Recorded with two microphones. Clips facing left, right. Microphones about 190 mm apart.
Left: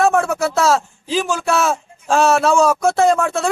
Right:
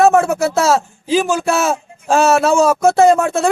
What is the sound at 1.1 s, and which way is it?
A man's voice, 5° right (ahead or behind).